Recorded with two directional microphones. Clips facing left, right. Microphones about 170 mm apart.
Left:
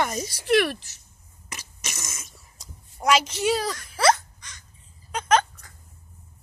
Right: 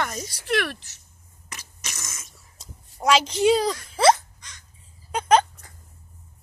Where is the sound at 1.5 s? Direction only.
15° left (ahead or behind).